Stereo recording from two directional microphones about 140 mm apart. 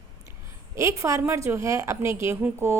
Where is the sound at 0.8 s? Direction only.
20° right (ahead or behind).